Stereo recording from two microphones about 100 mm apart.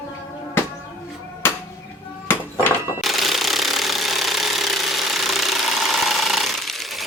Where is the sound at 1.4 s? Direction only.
25° left (ahead or behind).